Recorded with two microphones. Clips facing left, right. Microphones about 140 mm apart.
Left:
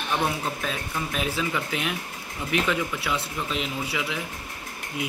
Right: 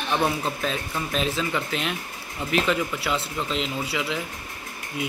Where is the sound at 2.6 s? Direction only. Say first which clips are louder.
Right 2 dB; 20° right (ahead or behind).